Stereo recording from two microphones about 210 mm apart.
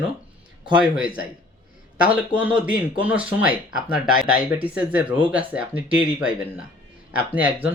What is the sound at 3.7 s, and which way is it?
Speech, 40° left (ahead or behind).